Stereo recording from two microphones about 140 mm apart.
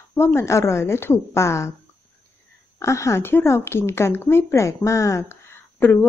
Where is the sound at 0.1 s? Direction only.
15° left (ahead or behind).